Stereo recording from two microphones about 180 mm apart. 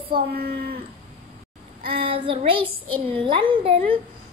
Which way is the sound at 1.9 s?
30° right (ahead or behind).